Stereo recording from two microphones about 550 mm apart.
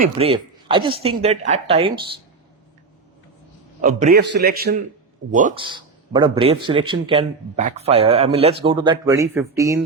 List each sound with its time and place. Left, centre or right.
0.0 s a man's voice: centre
3.8 s a man's voice: centre